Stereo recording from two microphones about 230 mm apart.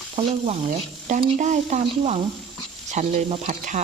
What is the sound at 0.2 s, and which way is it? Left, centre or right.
Speech, right.